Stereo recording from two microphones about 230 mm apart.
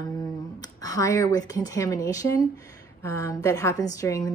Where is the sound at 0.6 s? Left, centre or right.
Centre.